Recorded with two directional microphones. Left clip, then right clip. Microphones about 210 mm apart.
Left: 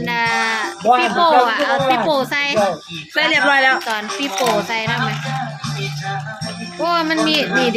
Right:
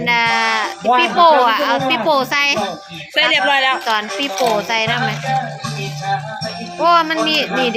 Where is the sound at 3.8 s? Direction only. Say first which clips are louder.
Right 3 dB; centre (ahead or behind).